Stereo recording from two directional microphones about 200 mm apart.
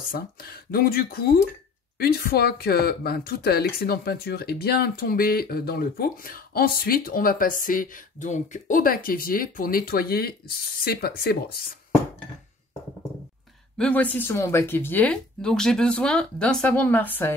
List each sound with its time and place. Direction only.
0.1 s speech: 50° left (ahead or behind)
13.7 s speech: 5° left (ahead or behind)